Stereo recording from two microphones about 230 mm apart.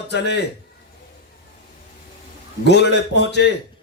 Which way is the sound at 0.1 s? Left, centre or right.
Left.